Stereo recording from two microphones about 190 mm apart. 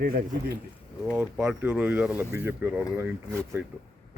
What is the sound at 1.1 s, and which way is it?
Speech, 5° right (ahead or behind).